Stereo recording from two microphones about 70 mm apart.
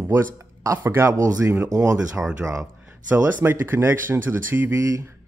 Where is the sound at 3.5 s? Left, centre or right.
Right.